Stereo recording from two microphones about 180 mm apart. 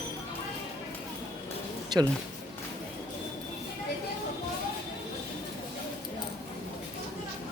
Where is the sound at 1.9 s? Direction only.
25° right (ahead or behind).